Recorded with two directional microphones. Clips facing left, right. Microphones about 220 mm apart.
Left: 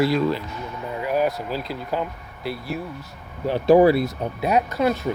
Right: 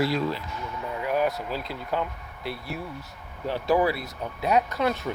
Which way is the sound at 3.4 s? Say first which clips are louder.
Left 9 dB; 20° left (ahead or behind).